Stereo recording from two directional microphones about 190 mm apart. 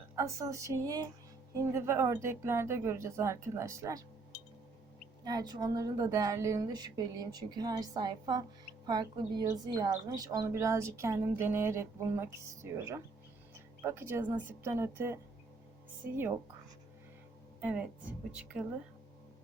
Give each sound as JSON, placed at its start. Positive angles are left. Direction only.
{"t": 0.2, "sound": "a woman's voice", "side_deg": -15}
{"t": 5.2, "sound": "a woman's voice", "side_deg": -20}
{"t": 17.6, "sound": "a woman's voice", "side_deg": -5}